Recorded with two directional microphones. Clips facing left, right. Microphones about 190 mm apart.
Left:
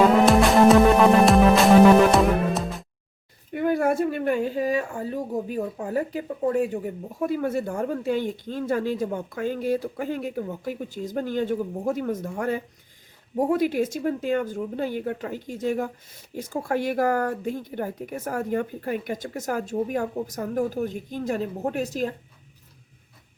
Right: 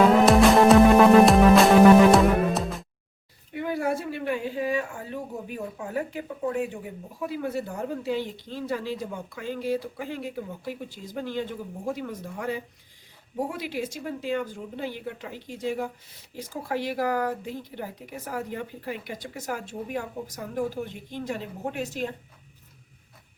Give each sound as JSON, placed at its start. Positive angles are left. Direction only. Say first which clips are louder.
{"t": 0.3, "sound": "music", "louder": "even", "side_deg": 0}
{"t": 3.5, "sound": "a woman's voice", "louder": "left 5 dB", "side_deg": 50}